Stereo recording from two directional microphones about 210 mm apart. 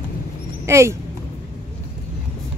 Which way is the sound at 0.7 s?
15° right (ahead or behind).